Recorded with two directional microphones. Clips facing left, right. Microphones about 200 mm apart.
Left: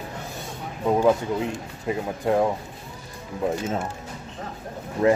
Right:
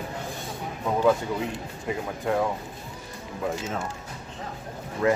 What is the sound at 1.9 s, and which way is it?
Speech, 25° left (ahead or behind).